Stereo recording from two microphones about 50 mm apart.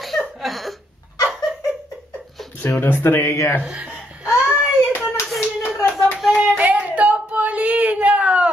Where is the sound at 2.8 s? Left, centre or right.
Left.